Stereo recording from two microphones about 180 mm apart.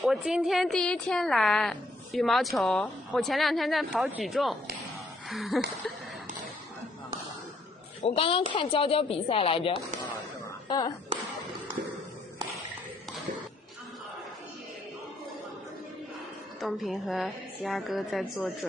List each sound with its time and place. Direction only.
0.0 s a woman's voice: 5° right (ahead or behind)
8.0 s speech: 30° left (ahead or behind)
16.6 s a woman's voice: centre (ahead or behind)